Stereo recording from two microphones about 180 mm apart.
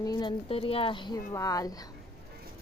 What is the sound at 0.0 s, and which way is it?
Speech, 25° left (ahead or behind).